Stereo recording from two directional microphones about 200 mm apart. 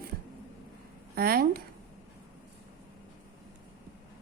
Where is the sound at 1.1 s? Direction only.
50° right (ahead or behind).